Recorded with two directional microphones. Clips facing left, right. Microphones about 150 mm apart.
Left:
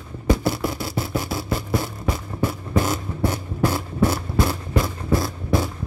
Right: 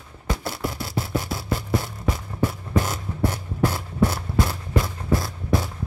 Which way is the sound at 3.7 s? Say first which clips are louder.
Left 2 dB; 5° left (ahead or behind).